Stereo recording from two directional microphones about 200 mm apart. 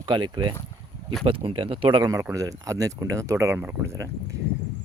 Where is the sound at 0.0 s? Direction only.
20° right (ahead or behind).